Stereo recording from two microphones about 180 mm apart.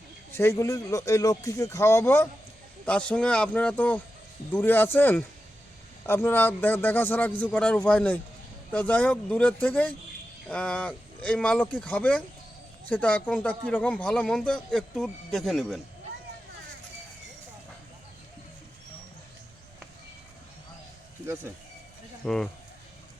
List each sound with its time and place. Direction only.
0.3 s a man's voice: 15° left (ahead or behind)
22.2 s speech: centre (ahead or behind)